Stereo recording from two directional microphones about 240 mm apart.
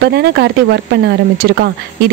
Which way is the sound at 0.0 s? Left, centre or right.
Right.